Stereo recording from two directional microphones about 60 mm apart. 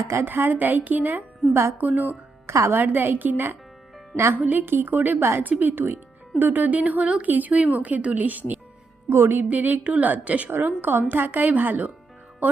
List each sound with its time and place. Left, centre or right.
0.1 s a woman's voice: right
2.5 s speech: right
2.7 s a woman's voice: right
9.0 s speech: right
9.4 s a woman's voice: right